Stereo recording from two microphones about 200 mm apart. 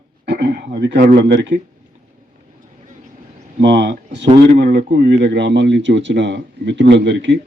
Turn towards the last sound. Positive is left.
turn(degrees=-60)  # may be behind; listen again after turning